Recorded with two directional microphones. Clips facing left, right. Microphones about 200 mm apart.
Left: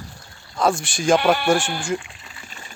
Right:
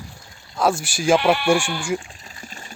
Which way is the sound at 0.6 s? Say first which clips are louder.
Even; 5° right (ahead or behind).